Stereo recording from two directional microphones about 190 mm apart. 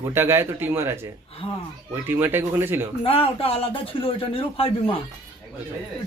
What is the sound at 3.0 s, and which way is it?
A man's voice, 30° left (ahead or behind).